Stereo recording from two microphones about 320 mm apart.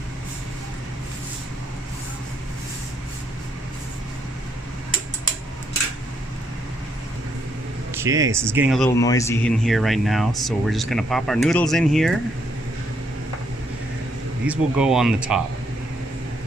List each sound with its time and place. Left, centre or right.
7.9 s speech: centre
9.0 s speech: centre
14.4 s speech: centre